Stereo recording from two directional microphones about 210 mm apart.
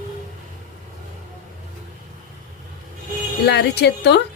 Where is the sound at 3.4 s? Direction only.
50° left (ahead or behind).